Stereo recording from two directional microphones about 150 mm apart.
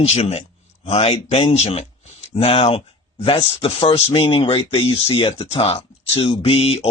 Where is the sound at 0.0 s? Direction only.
45° left (ahead or behind).